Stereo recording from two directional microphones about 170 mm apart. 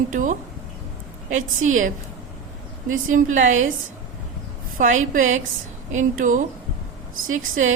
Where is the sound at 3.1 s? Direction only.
50° right (ahead or behind).